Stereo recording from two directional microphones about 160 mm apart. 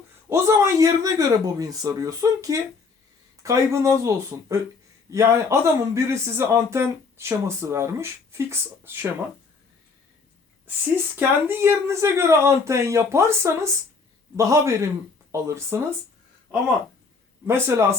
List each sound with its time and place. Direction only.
0.3 s speech: 15° right (ahead or behind)
10.9 s speech: 15° right (ahead or behind)
17.4 s speech: 15° right (ahead or behind)